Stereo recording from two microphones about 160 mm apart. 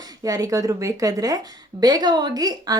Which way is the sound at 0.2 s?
20° right (ahead or behind).